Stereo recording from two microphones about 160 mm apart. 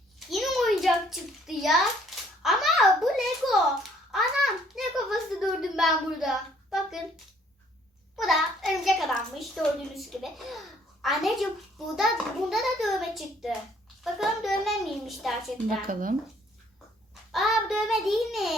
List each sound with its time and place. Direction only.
0.2 s a sound: centre (ahead or behind)
5.3 s speech: centre (ahead or behind)
8.1 s child singing: centre (ahead or behind)
8.7 s a child's voice: centre (ahead or behind)
15.9 s speech: 60° right (ahead or behind)
17.3 s child singing: centre (ahead or behind)